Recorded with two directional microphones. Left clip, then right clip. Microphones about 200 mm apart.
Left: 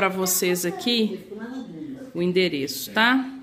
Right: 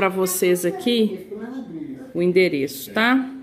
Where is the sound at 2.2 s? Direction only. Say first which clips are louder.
Right 5 dB; 15° right (ahead or behind).